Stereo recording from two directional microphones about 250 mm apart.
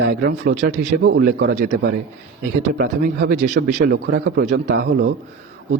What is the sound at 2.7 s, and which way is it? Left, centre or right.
A man's voice, right.